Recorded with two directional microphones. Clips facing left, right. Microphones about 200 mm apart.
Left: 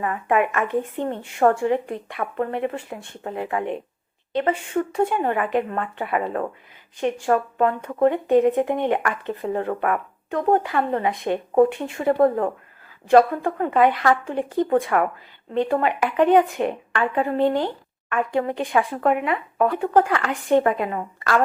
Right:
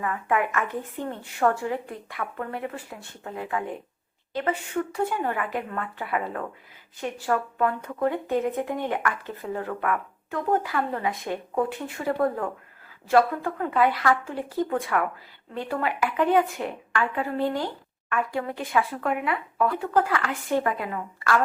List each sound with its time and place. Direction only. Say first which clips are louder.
0.0 s a woman's voice: left 4 dB; 25° left (ahead or behind)
10.7 s speech: left 5 dB; 25° left (ahead or behind)
12.1 s speech: left 7 dB; 35° left (ahead or behind); by 14.7 s 20° left (ahead or behind)
14.9 s speech: left 5 dB; 35° left (ahead or behind)
15.8 s speech: left 5 dB; 20° left (ahead or behind)